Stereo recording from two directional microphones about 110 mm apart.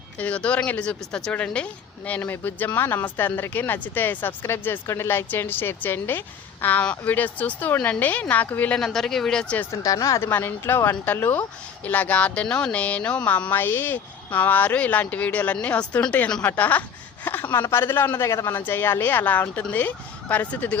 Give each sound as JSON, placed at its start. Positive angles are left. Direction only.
{"t": 0.2, "sound": "speech", "side_deg": 10}
{"t": 8.8, "sound": "speech", "side_deg": 5}
{"t": 9.7, "sound": "speech", "side_deg": 35}
{"t": 10.2, "sound": "speech", "side_deg": 20}